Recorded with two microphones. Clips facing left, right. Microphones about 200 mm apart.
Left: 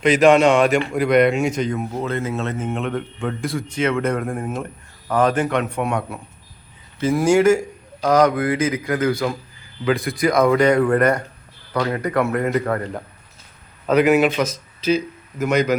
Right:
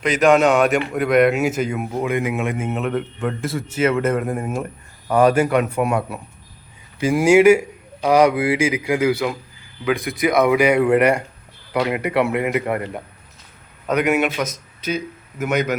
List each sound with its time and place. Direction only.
0.0 s a man's voice: centre (ahead or behind)
14.2 s a man's voice: 5° right (ahead or behind)